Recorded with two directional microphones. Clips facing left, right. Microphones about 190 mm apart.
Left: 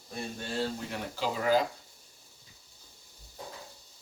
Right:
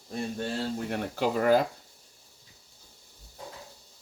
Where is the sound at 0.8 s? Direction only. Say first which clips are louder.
Right 6 dB; 55° right (ahead or behind).